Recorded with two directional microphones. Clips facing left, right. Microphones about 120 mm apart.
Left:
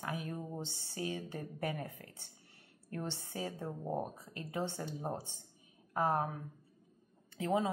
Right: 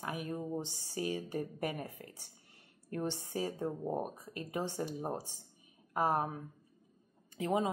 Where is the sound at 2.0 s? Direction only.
40° right (ahead or behind).